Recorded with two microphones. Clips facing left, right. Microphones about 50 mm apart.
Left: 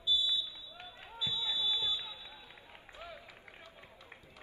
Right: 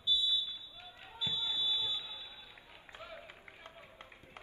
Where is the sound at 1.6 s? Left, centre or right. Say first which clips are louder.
Left 2 dB; left.